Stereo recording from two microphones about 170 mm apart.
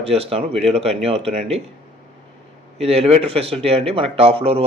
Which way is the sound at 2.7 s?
35° right (ahead or behind).